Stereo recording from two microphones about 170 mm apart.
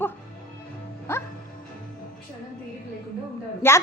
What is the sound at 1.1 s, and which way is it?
Music, 15° left (ahead or behind).